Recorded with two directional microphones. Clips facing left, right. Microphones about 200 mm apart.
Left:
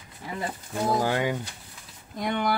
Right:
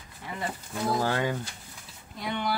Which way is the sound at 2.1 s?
50° left (ahead or behind).